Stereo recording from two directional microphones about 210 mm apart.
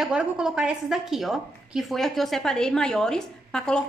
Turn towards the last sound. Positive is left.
turn(degrees=5)  # may be behind; listen again after turning